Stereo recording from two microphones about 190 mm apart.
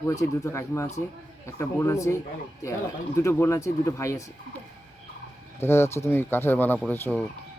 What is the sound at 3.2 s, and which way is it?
Speech, 15° left (ahead or behind).